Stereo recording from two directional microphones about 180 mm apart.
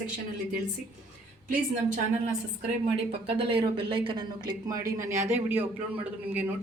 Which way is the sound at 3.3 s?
30° right (ahead or behind).